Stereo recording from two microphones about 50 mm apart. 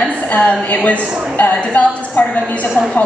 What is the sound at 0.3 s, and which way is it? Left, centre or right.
A woman's voice, left.